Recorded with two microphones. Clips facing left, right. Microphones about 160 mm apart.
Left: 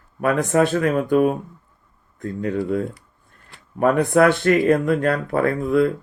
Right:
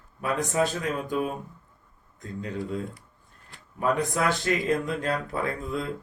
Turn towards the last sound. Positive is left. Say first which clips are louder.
# left 12 dB
turn(degrees=60)  # may be behind; listen again after turning